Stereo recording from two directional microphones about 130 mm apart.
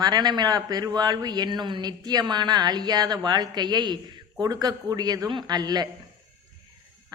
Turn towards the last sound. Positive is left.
turn(degrees=-30)  # may be behind; listen again after turning